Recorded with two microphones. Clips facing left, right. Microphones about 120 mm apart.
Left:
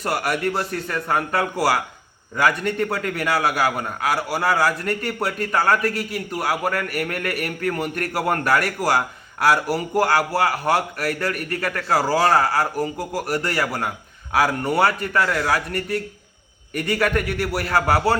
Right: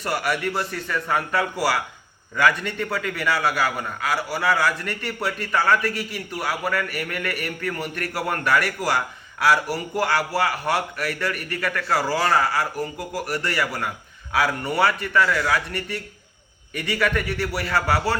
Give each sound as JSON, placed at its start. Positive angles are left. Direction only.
{"t": 0.0, "sound": "a man's voice", "side_deg": 45}